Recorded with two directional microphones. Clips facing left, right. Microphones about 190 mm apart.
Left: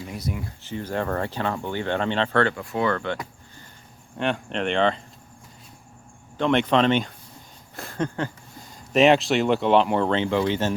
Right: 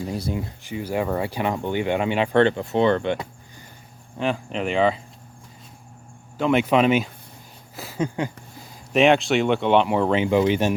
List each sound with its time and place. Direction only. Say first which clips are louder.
0.0 s speech: right 4 dB; 30° right (ahead or behind)
0.6 s speech: right 1 dB; 10° right (ahead or behind)
4.2 s speech: right 1 dB; centre (ahead or behind)
6.3 s speech: right 1 dB; 5° right (ahead or behind)
7.8 s a sound: right 2 dB; 5° right (ahead or behind)
8.9 s speech: even; centre (ahead or behind); by 10.8 s 15° right (ahead or behind)